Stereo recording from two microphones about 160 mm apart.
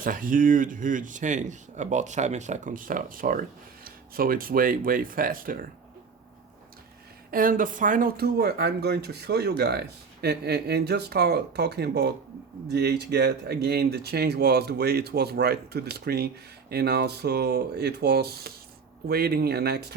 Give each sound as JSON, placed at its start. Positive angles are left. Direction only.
{"t": 0.0, "sound": "speech", "side_deg": -60}
{"t": 7.3, "sound": "speech", "side_deg": -60}